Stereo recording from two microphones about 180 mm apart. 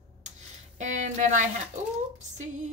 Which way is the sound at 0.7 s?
45° right (ahead or behind).